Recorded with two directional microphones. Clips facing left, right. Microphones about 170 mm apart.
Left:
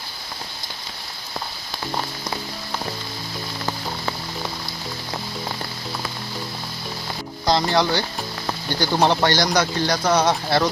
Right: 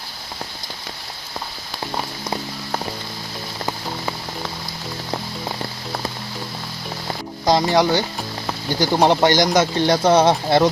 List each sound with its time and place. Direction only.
7.4 s speech: 15° right (ahead or behind)